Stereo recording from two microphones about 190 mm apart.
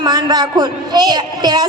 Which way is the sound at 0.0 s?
20° right (ahead or behind).